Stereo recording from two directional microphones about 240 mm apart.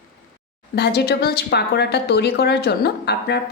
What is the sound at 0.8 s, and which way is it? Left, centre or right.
A woman's voice, left.